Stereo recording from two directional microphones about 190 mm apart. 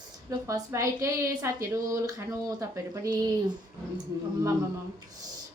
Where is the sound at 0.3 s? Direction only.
15° right (ahead or behind).